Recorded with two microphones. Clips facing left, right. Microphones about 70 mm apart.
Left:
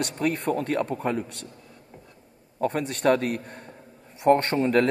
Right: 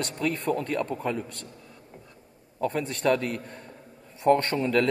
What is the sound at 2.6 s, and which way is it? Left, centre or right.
Speech, left.